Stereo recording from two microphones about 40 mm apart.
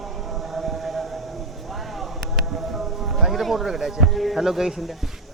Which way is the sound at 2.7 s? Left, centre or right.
Centre.